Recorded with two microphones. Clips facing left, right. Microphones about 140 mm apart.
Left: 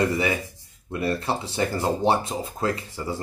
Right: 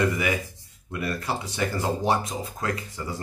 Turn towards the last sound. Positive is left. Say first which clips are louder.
# left 2 dB
turn(degrees=30)  # may be behind; listen again after turning